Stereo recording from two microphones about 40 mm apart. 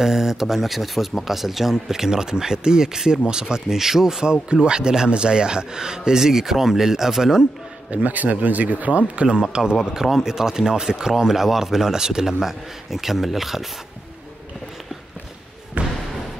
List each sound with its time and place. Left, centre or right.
0.0 s speech: centre
7.9 s speech: right
9.4 s speech: centre
9.9 s speech: centre
15.8 s slam: right